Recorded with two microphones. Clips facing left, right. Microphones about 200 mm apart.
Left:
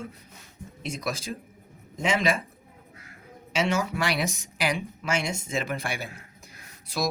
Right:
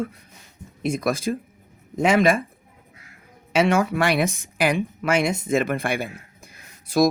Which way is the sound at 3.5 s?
55° right (ahead or behind).